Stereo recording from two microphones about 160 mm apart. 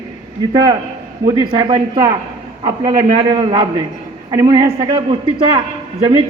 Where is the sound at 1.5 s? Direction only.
35° right (ahead or behind).